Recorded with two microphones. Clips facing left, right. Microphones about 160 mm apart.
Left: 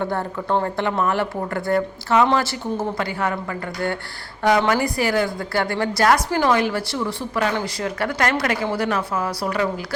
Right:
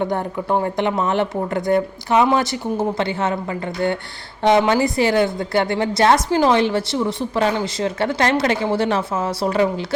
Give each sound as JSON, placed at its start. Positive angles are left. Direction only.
{"t": 0.0, "sound": "a woman's voice", "side_deg": -15}